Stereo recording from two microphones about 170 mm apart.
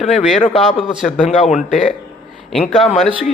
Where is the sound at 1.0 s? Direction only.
45° left (ahead or behind).